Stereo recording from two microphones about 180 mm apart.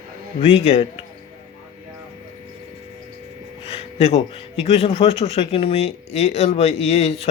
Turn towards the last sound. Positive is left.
turn(degrees=35)  # may be behind; listen again after turning